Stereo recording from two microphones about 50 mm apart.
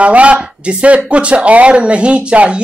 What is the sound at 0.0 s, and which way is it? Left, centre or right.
Speech, right.